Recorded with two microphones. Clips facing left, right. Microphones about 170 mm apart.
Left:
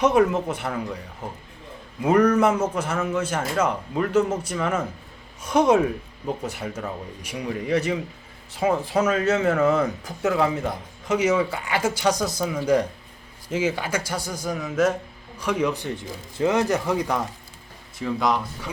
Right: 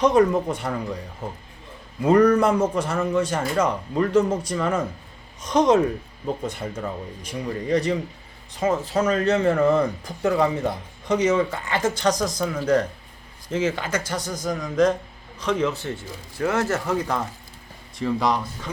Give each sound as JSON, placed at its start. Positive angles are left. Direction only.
{"t": 0.0, "sound": "a man's voice", "side_deg": 5}
{"t": 2.0, "sound": "a man's voice", "side_deg": 5}
{"t": 18.0, "sound": "a man's voice", "side_deg": 0}